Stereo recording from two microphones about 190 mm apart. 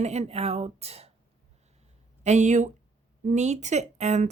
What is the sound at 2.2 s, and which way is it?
Speech, 40° right (ahead or behind).